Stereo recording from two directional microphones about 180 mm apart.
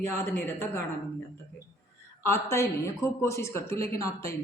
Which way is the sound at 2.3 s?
15° left (ahead or behind).